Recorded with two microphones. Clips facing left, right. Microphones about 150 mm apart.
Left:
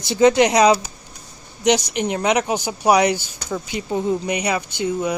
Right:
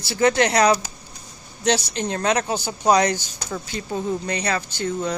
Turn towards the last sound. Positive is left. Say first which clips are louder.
# left 3 dB
turn(degrees=10)  # may be behind; listen again after turning